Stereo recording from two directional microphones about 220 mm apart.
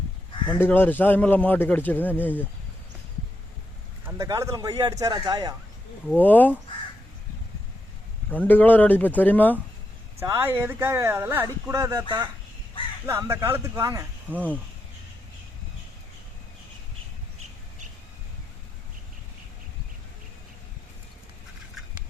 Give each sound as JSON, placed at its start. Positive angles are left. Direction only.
{"t": 0.6, "sound": "a man's voice", "side_deg": 10}
{"t": 4.0, "sound": "speech", "side_deg": -15}
{"t": 6.1, "sound": "a man's voice", "side_deg": 10}
{"t": 8.3, "sound": "a man's voice", "side_deg": 10}
{"t": 10.2, "sound": "speech", "side_deg": -10}